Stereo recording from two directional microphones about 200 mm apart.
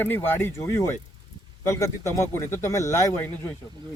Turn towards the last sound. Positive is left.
turn(degrees=10)  # may be behind; listen again after turning